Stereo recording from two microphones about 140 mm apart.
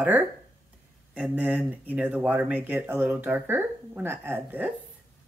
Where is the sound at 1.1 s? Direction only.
10° right (ahead or behind).